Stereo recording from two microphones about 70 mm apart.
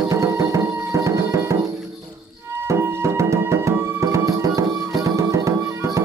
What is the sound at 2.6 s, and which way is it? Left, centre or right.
Music, right.